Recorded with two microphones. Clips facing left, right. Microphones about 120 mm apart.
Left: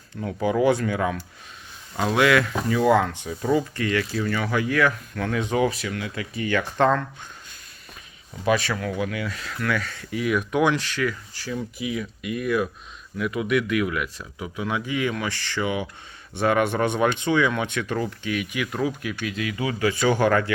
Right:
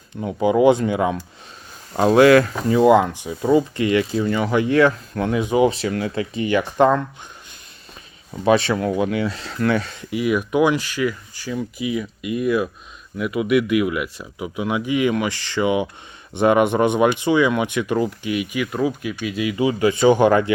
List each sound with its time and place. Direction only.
0.1 s speech: 20° right (ahead or behind)
1.9 s speech: 35° right (ahead or behind)
2.8 s speech: 15° right (ahead or behind)
5.3 s speech: 10° right (ahead or behind)
5.6 s speech: 30° right (ahead or behind)
6.3 s speech: 20° right (ahead or behind)
8.3 s speech: 30° right (ahead or behind)